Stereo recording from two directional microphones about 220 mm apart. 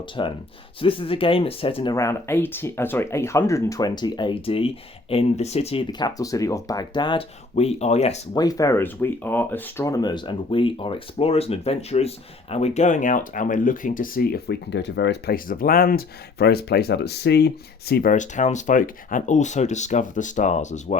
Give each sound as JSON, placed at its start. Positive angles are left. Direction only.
{"t": 0.2, "sound": "speech", "side_deg": 20}
{"t": 8.3, "sound": "speech", "side_deg": 15}